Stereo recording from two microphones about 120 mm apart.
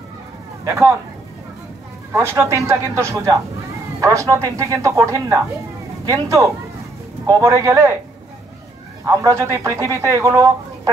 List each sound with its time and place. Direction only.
0.7 s speech: 20° right (ahead or behind)
2.1 s speech: 20° right (ahead or behind)
9.0 s speech: 25° right (ahead or behind)